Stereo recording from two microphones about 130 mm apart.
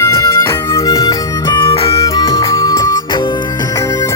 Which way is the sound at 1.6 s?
45° left (ahead or behind).